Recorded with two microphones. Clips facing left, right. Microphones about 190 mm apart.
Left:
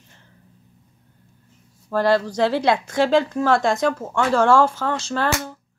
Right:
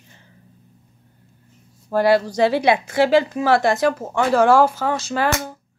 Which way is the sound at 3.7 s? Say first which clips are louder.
Right 2 dB; 5° right (ahead or behind).